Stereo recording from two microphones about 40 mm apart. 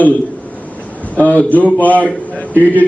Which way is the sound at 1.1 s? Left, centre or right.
Left.